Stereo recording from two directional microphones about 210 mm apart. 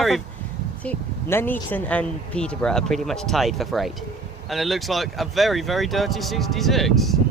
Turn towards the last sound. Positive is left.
turn(degrees=0)  # may be behind; listen again after turning